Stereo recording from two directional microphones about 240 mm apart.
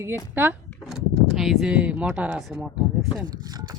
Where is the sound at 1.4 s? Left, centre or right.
Centre.